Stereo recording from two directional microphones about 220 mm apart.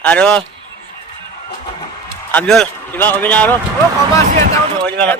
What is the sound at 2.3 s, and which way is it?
Speech, 5° left (ahead or behind).